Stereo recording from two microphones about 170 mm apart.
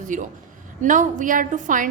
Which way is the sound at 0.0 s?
50° right (ahead or behind).